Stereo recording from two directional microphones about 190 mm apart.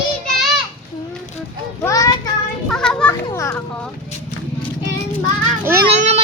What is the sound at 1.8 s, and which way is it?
Speech, 15° left (ahead or behind).